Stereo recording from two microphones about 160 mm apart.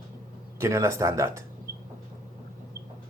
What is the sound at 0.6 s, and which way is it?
Speech, 15° right (ahead or behind).